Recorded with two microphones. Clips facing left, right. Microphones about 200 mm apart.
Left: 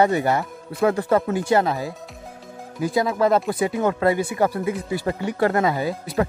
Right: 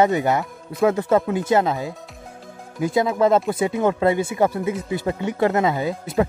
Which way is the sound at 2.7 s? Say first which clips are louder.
Right 2 dB; 20° right (ahead or behind).